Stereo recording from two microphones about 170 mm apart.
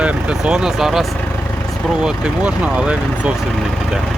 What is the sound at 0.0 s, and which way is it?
Speech, 5° right (ahead or behind).